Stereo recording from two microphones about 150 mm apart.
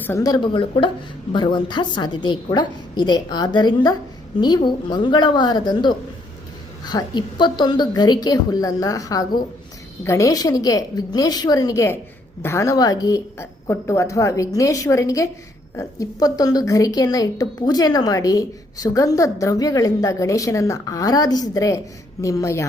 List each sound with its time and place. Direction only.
0.0 s speech: 15° left (ahead or behind)
0.3 s a woman's voice: 30° left (ahead or behind)